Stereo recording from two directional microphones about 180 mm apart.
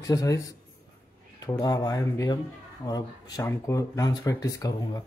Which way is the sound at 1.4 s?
25° left (ahead or behind).